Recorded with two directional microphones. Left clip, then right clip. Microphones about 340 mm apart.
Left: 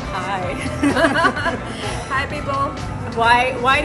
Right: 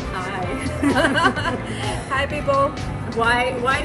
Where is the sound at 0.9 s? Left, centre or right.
Centre.